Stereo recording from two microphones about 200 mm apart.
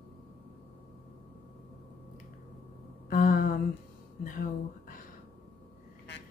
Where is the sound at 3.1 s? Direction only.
45° left (ahead or behind).